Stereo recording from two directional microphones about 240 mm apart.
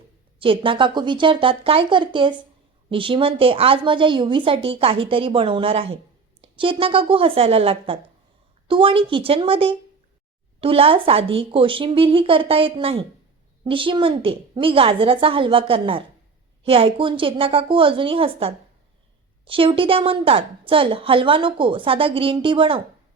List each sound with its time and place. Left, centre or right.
0.3 s a woman's voice: right